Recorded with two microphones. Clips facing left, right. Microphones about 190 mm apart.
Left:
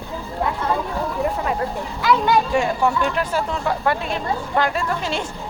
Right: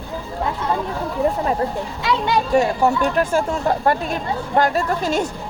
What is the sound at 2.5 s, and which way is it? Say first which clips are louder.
Speech: right 3 dB; 40° right (ahead or behind).